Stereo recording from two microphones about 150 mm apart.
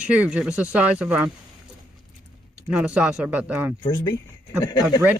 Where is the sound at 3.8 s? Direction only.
25° left (ahead or behind).